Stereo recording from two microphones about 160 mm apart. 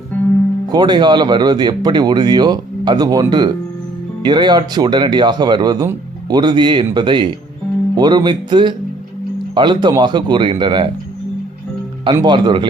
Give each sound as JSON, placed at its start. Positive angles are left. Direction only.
{"t": 0.7, "sound": "speech", "side_deg": -25}
{"t": 12.0, "sound": "speech", "side_deg": -30}